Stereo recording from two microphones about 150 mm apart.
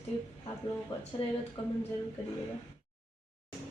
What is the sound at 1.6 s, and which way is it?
Speech, 35° left (ahead or behind).